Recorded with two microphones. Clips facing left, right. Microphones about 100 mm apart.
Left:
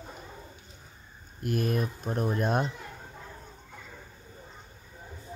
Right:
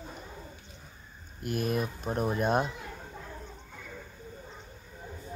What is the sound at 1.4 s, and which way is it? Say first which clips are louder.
A child's voice: left 2 dB; centre (ahead or behind).